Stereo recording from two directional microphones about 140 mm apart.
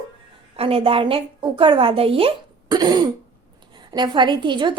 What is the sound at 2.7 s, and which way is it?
A woman's voice, 30° right (ahead or behind).